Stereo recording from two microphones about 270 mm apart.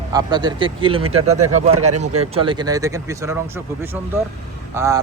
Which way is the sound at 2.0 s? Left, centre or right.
Right.